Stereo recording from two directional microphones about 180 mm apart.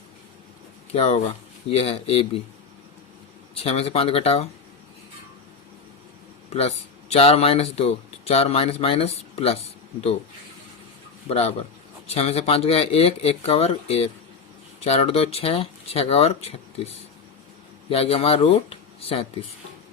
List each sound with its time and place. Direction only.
0.9 s speech: 35° left (ahead or behind)
3.5 s speech: 35° left (ahead or behind)
6.5 s speech: 35° left (ahead or behind)
11.3 s speech: 35° left (ahead or behind)